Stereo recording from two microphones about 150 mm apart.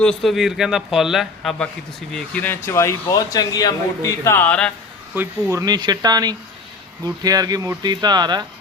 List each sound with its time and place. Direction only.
0.0 s a man's voice: 5° left (ahead or behind)
5.1 s speech: 15° right (ahead or behind)